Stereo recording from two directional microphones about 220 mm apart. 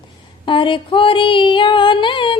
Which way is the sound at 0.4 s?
20° left (ahead or behind).